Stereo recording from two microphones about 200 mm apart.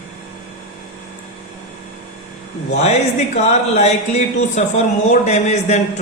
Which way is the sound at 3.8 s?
35° left (ahead or behind).